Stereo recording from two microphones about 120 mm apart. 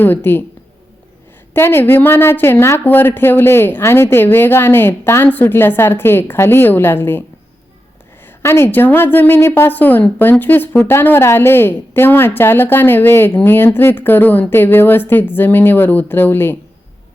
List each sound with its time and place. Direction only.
0.0 s a woman's voice: 15° left (ahead or behind)
1.5 s a woman's voice: 20° left (ahead or behind)